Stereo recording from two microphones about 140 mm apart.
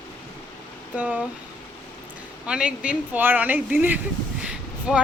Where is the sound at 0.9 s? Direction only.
10° right (ahead or behind).